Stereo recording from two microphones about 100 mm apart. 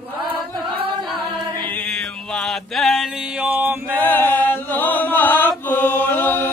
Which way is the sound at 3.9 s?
20° left (ahead or behind).